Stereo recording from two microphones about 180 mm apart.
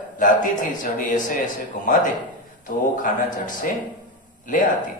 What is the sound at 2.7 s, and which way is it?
A man's voice, 45° left (ahead or behind).